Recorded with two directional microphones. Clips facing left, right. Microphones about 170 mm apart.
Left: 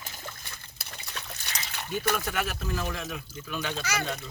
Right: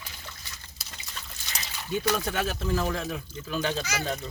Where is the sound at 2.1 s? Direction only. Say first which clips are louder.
Right 2 dB; 25° right (ahead or behind).